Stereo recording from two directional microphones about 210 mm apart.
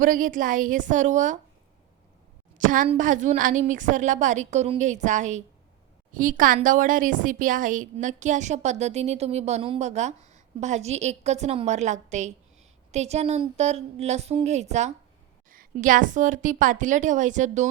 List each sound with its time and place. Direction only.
0.0 s a woman's voice: 40° right (ahead or behind)
2.6 s a woman's voice: 40° right (ahead or behind)